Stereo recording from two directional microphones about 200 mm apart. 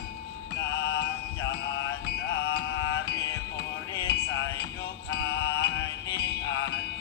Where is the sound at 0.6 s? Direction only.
60° left (ahead or behind).